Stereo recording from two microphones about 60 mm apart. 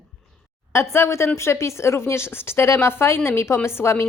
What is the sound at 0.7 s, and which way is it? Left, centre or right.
Speech, left.